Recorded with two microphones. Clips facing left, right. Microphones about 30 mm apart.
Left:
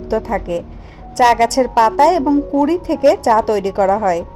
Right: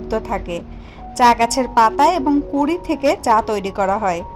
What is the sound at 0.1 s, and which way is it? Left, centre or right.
Speech, centre.